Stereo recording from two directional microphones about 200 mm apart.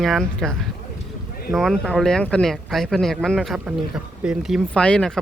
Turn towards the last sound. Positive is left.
turn(degrees=5)  # may be behind; listen again after turning